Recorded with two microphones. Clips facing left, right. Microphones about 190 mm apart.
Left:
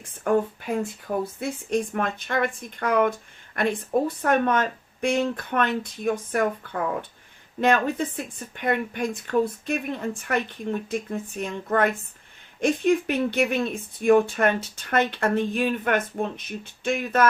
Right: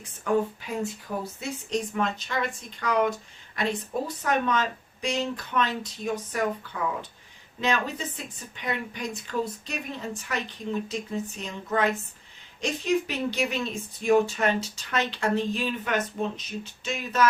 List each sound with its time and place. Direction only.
0.3 s speech: 55° left (ahead or behind)